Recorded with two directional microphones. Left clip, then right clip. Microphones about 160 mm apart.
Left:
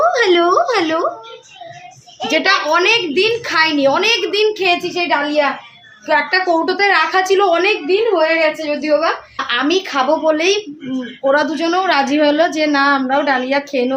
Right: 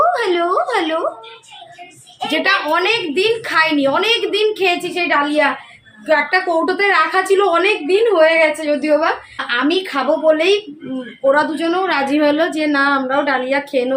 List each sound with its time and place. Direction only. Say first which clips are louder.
0.1 s a sound: left 4 dB; 30° left (ahead or behind)
2.3 s a woman's voice: left 2 dB; 15° left (ahead or behind)
9.5 s a woman's voice: left 1 dB; 15° left (ahead or behind)